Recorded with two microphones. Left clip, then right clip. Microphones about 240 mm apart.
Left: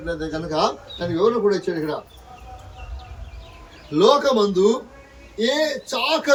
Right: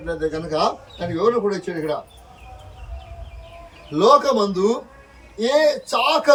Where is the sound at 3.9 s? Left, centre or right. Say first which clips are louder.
Right 1 dB; centre.